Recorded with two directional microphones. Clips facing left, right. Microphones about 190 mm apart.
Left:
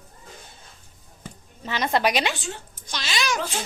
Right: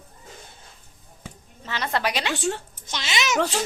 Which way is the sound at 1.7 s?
15° left (ahead or behind).